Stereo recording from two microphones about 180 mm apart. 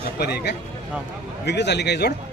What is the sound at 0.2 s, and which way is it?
A man's voice, 60° left (ahead or behind).